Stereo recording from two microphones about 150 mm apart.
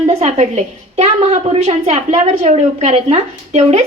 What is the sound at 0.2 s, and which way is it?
A woman's voice, 50° right (ahead or behind).